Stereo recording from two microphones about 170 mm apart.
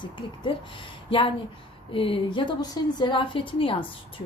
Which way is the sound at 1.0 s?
30° left (ahead or behind).